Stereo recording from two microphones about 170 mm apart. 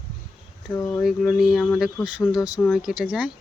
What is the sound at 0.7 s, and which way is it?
Speech, 15° left (ahead or behind).